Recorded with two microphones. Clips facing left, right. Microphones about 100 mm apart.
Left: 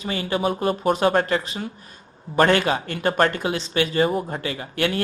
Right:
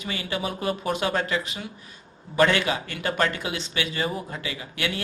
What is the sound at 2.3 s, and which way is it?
Speech, 45° left (ahead or behind).